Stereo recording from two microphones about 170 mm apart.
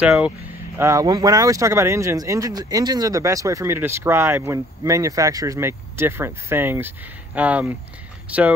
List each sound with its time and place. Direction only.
0.0 s speech: 5° right (ahead or behind)
0.7 s speech: 15° right (ahead or behind)